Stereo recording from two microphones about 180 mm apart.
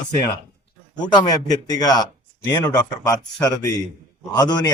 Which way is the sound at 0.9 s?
25° left (ahead or behind).